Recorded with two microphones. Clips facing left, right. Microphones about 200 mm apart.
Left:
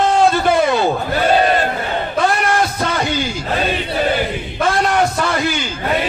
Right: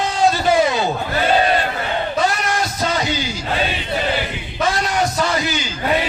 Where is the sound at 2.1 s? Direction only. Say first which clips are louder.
Left 6 dB; 60° left (ahead or behind).